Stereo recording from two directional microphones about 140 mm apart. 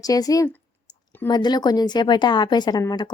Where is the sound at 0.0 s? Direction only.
25° left (ahead or behind).